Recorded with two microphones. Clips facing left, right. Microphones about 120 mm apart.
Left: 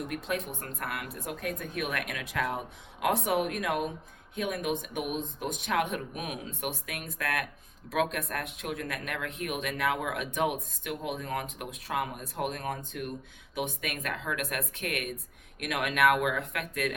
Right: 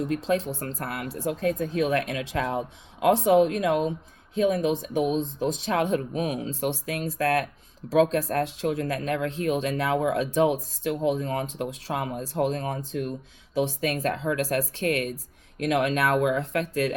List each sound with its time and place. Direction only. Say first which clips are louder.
0.0 s speech: right 8 dB; 30° right (ahead or behind)